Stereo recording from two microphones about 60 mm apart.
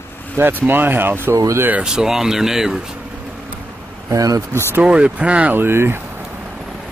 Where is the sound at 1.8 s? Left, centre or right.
Centre.